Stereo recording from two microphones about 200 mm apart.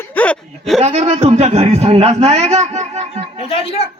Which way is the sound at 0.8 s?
30° right (ahead or behind).